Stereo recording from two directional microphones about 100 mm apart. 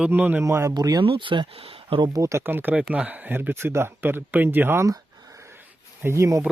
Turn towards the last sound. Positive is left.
turn(degrees=-30)  # may be behind; listen again after turning